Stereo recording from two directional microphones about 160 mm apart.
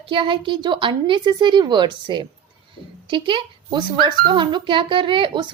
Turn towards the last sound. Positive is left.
turn(degrees=-30)  # may be behind; listen again after turning